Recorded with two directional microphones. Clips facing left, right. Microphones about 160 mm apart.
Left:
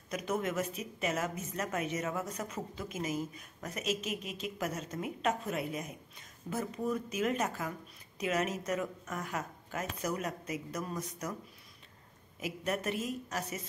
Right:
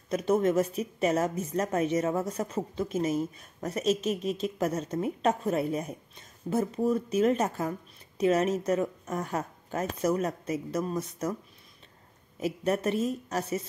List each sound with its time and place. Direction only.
0.1 s a woman's voice: 30° right (ahead or behind)
12.4 s a woman's voice: 30° right (ahead or behind)